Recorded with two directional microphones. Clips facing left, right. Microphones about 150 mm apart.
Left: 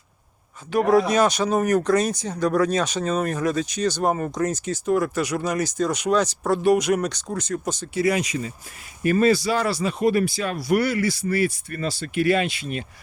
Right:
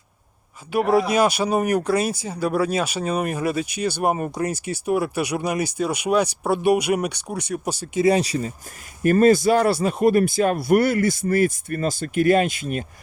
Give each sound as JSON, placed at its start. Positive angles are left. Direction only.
{"t": 0.7, "sound": "speech", "side_deg": -10}
{"t": 7.9, "sound": "speech", "side_deg": -30}
{"t": 9.0, "sound": "speech", "side_deg": -50}